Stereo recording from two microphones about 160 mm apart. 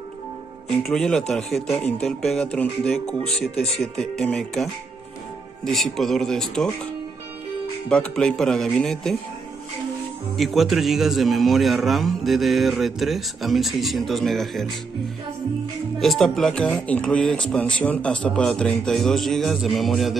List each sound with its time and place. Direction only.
0.7 s a man's voice: centre (ahead or behind)
3.5 s speech: 40° left (ahead or behind)
3.9 s a man's voice: 5° left (ahead or behind)
5.7 s a man's voice: centre (ahead or behind)
7.9 s a man's voice: 5° left (ahead or behind)
10.3 s a man's voice: centre (ahead or behind)
16.0 s a man's voice: centre (ahead or behind)